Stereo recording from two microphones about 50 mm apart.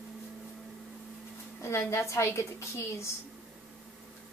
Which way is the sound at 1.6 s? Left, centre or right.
Left.